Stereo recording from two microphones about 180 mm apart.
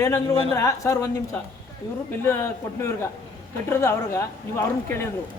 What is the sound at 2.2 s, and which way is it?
A man's voice, 15° left (ahead or behind).